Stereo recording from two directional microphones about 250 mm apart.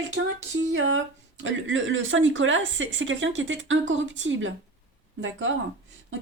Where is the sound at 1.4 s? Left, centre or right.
Right.